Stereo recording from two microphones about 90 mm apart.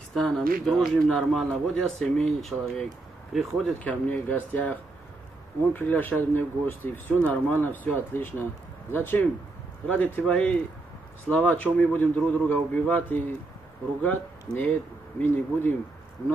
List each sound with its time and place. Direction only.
0.1 s a man's voice: 5° left (ahead or behind)
4.1 s a man's voice: 15° left (ahead or behind)